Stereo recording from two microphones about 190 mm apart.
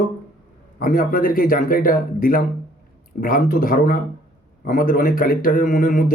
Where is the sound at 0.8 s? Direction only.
45° left (ahead or behind).